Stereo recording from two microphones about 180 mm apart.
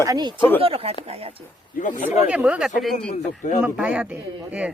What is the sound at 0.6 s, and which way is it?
Speech, 35° right (ahead or behind).